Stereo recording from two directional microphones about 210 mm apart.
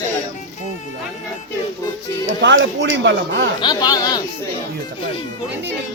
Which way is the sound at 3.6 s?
20° left (ahead or behind).